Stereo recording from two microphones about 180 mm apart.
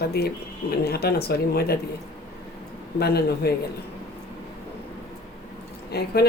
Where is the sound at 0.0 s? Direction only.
60° left (ahead or behind).